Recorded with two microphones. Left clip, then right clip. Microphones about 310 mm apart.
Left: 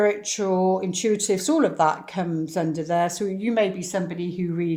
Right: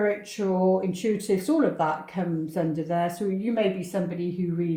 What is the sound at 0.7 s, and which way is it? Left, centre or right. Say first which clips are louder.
Speech: left 1 dB; centre.